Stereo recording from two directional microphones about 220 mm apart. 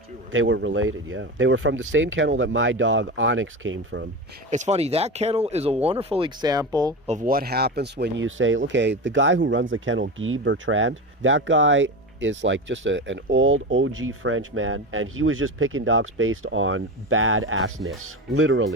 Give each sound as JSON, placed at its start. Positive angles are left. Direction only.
{"t": 0.3, "sound": "speech", "side_deg": -60}
{"t": 4.5, "sound": "speech", "side_deg": -30}
{"t": 7.1, "sound": "speech", "side_deg": -40}